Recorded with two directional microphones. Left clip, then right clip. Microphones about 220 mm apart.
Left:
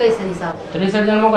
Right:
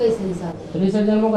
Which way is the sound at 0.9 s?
20° left (ahead or behind).